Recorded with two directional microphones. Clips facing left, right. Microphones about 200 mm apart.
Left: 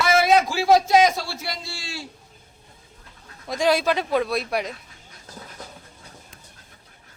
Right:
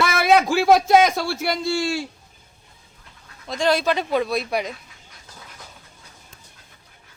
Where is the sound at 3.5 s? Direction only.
10° left (ahead or behind).